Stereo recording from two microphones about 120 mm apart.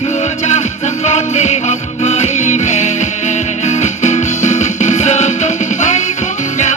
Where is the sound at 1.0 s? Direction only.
70° left (ahead or behind).